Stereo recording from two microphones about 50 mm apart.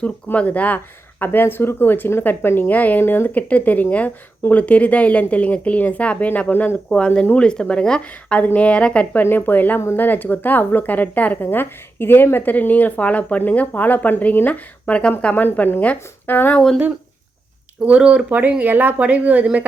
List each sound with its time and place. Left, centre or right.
0.3 s speech: left
1.2 s speech: left
6.9 s speech: centre
9.2 s speech: left
11.4 s speech: left
15.4 s speech: left
15.8 s speech: left
16.3 s speech: left
17.8 s speech: right
18.3 s speech: right